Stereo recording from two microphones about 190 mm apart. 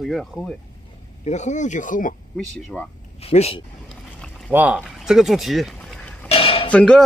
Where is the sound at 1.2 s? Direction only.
40° left (ahead or behind).